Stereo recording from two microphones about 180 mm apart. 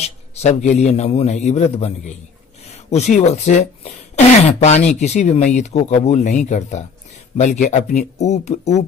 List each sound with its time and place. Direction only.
0.3 s speech: 40° left (ahead or behind)
2.9 s speech: 40° left (ahead or behind)